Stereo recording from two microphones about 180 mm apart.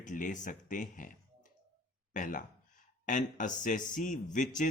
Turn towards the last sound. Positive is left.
turn(degrees=45)  # may be behind; listen again after turning